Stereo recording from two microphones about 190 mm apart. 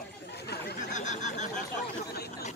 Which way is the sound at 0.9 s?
40° left (ahead or behind).